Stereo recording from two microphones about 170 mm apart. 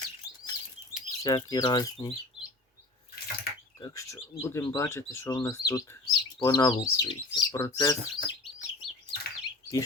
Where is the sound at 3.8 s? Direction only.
20° left (ahead or behind).